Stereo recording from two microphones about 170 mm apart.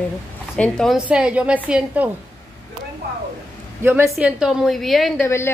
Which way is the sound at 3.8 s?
10° right (ahead or behind).